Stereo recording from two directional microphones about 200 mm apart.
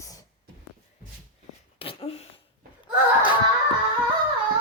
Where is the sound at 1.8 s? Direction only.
25° left (ahead or behind).